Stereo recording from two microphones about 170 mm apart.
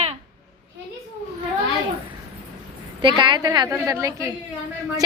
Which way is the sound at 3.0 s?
30° right (ahead or behind).